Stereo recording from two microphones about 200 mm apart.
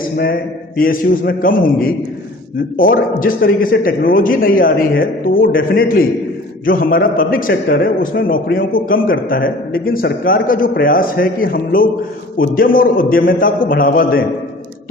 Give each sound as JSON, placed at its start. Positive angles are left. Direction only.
{"t": 0.8, "sound": "a man's voice", "side_deg": 45}